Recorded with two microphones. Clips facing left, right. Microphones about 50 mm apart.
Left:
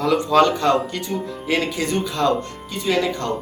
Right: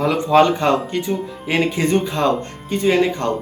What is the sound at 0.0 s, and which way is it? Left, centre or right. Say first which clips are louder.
Speech: right 2 dB; right.